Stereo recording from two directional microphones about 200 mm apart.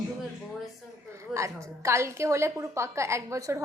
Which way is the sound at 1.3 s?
15° right (ahead or behind).